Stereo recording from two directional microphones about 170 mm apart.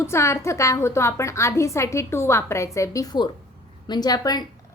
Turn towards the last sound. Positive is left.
turn(degrees=25)  # may be behind; listen again after turning